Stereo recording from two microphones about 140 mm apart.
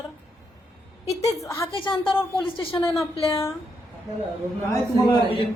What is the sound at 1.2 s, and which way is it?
Speech, 20° left (ahead or behind).